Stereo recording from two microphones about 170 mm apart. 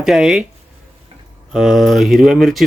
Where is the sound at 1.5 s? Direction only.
5° right (ahead or behind).